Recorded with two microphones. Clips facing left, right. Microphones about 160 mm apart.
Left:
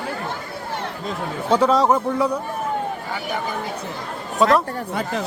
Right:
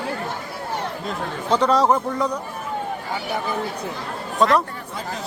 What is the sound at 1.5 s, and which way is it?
Speech, 5° left (ahead or behind).